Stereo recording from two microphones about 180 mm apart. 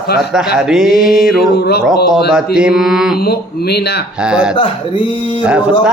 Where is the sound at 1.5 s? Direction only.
65° left (ahead or behind).